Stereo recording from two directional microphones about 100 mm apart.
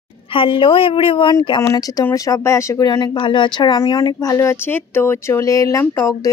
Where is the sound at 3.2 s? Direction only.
55° left (ahead or behind).